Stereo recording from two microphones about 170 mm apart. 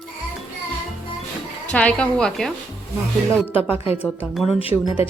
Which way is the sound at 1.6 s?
5° left (ahead or behind).